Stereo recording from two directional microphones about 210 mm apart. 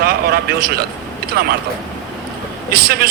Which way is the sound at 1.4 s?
50° right (ahead or behind).